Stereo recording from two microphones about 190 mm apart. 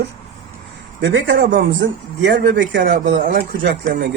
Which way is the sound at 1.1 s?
85° right.